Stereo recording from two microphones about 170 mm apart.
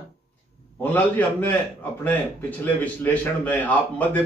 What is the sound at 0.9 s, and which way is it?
Speech, 10° left (ahead or behind).